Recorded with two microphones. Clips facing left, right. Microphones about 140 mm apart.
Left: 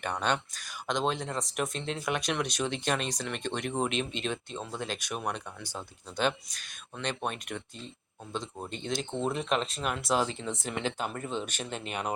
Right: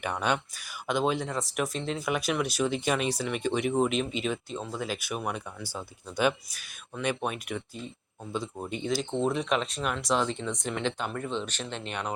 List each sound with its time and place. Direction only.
0.0 s speech: 10° right (ahead or behind); by 12.1 s 5° left (ahead or behind)